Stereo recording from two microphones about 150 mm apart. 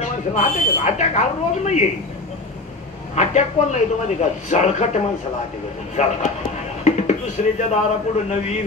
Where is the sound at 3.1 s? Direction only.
50° left (ahead or behind).